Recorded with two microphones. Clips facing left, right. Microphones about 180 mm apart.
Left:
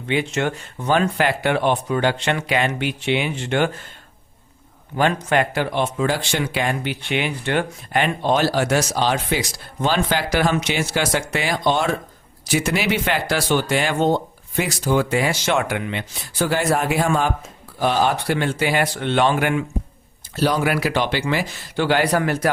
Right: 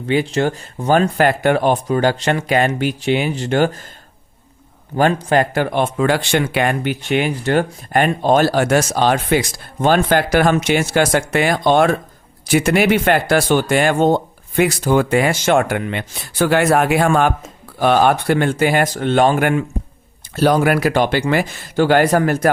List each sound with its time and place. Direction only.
0.1 s speech: 35° right (ahead or behind)
4.9 s speech: 40° right (ahead or behind)